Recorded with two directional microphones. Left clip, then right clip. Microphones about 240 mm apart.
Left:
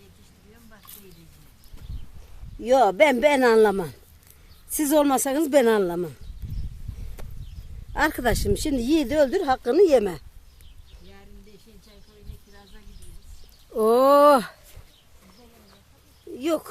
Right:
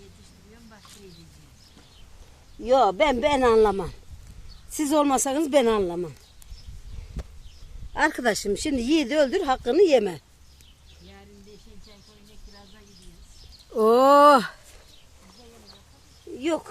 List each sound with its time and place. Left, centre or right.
2.6 s speech: left
7.2 s a sound: left
7.9 s speech: centre
13.7 s speech: centre
16.4 s speech: centre